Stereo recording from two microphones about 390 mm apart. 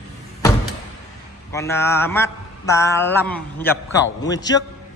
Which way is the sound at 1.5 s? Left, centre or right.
Centre.